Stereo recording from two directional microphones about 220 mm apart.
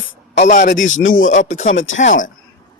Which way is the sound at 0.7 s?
60° left (ahead or behind).